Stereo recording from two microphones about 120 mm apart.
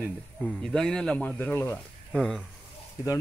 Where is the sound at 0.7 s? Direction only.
5° left (ahead or behind).